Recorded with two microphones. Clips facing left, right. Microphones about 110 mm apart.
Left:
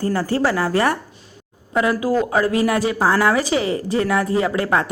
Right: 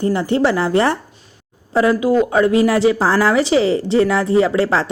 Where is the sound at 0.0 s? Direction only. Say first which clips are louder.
Right 3 dB; 20° right (ahead or behind).